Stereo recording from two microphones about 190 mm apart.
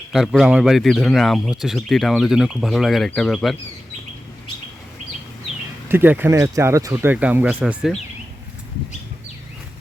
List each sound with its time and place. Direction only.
0.1 s speech: centre (ahead or behind)
5.9 s speech: 10° right (ahead or behind)